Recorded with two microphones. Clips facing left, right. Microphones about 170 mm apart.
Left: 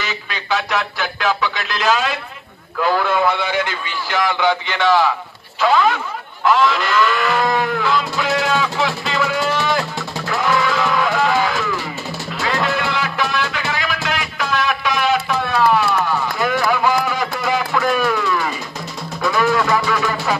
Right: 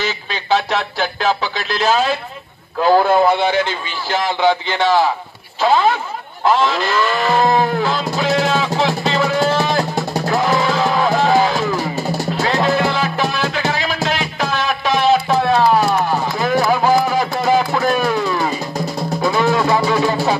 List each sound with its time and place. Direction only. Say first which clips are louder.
0.0 s a man's voice: right 4 dB; 30° right (ahead or behind)
6.4 s music: even; 30° right (ahead or behind)